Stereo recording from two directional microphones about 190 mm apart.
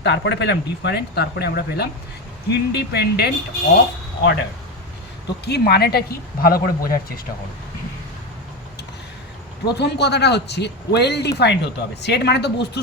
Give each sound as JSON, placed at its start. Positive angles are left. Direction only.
{"t": 0.0, "sound": "speech", "side_deg": 65}
{"t": 5.5, "sound": "speech", "side_deg": 55}
{"t": 9.7, "sound": "speech", "side_deg": 60}